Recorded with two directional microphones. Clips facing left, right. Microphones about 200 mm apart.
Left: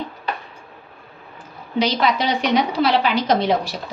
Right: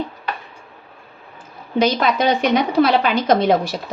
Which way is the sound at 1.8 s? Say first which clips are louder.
Right 3 dB; 50° right (ahead or behind).